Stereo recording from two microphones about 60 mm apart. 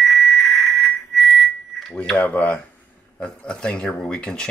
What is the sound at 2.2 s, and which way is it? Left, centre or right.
Speech, left.